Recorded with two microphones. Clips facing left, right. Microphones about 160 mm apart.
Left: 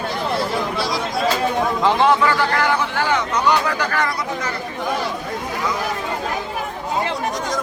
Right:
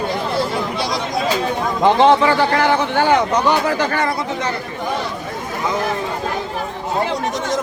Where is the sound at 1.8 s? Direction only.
20° right (ahead or behind).